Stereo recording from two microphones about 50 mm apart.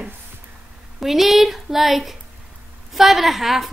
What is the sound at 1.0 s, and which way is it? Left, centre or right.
A woman's voice, centre.